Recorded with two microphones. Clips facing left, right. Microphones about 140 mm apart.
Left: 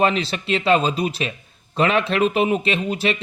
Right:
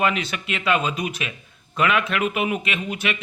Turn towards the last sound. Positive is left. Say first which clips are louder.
# left 5 dB
turn(degrees=30)  # may be behind; listen again after turning